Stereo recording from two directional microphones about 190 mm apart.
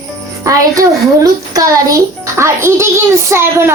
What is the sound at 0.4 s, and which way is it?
A child's voice, 20° right (ahead or behind).